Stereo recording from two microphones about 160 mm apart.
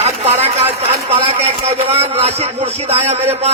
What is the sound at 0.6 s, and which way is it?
Speech, 35° right (ahead or behind).